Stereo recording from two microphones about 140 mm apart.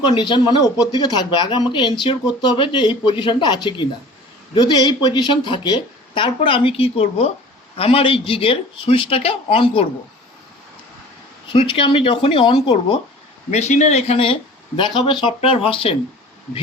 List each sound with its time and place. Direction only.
0.1 s speech: 35° left (ahead or behind)
11.5 s speech: 40° left (ahead or behind)
13.5 s speech: 50° left (ahead or behind)